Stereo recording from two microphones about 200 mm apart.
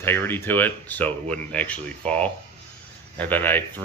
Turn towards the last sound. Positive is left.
turn(degrees=10)  # may be behind; listen again after turning